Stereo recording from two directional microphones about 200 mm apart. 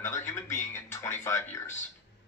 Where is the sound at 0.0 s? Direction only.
15° left (ahead or behind).